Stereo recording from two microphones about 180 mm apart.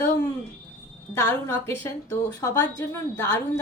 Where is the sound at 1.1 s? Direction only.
15° left (ahead or behind).